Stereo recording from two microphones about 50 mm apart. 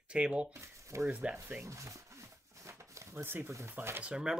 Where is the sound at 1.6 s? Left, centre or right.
Right.